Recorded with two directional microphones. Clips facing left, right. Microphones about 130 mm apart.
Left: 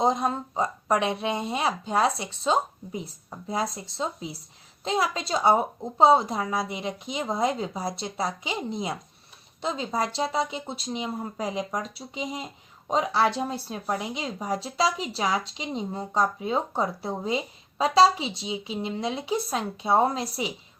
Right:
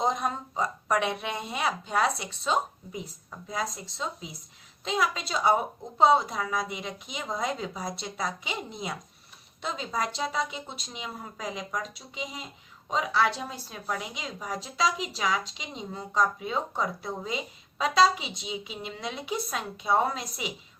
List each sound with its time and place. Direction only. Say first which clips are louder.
0.0 s speech: left 4 dB; 25° left (ahead or behind)
9.6 s speech: left 4 dB; 30° left (ahead or behind)